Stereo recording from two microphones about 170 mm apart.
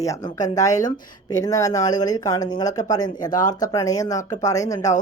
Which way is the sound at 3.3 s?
50° left (ahead or behind).